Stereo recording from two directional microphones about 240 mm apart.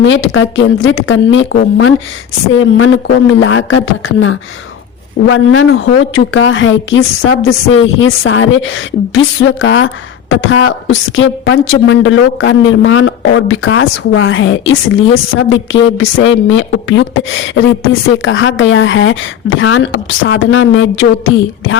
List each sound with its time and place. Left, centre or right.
0.0 s a woman's voice: left